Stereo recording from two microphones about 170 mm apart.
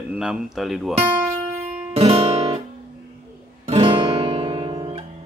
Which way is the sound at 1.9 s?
35° right (ahead or behind).